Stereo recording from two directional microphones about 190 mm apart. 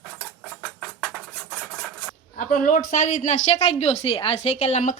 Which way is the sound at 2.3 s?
45° left (ahead or behind).